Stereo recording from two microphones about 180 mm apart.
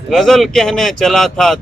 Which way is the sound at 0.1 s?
Centre (ahead or behind).